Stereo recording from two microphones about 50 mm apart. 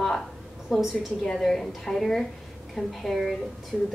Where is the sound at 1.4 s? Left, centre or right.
Centre.